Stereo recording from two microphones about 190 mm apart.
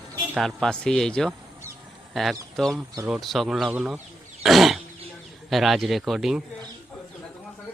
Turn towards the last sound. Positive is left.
turn(degrees=0)  # may be behind; listen again after turning